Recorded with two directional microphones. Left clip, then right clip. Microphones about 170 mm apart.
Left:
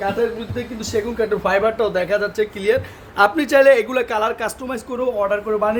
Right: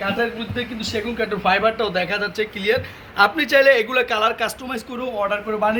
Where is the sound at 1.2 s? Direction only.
50° left (ahead or behind).